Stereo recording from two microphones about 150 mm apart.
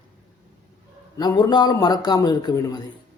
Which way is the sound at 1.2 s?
25° left (ahead or behind).